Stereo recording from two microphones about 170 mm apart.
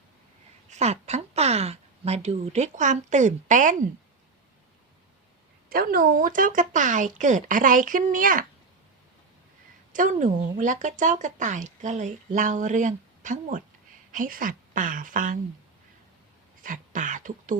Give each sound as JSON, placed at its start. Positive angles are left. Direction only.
{"t": 0.7, "sound": "speech", "side_deg": -40}
{"t": 5.6, "sound": "speech", "side_deg": -60}
{"t": 9.9, "sound": "speech", "side_deg": -50}
{"t": 16.6, "sound": "a sound", "side_deg": -50}